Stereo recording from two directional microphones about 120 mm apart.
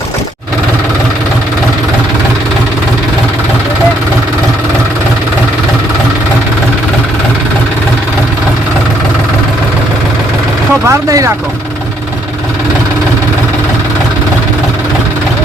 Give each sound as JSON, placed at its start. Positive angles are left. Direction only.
{"t": 10.8, "sound": "speech", "side_deg": -25}